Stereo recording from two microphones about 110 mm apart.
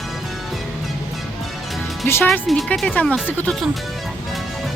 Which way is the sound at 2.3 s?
Centre (ahead or behind).